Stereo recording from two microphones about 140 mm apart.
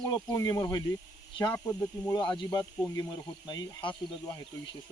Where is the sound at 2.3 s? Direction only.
30° left (ahead or behind).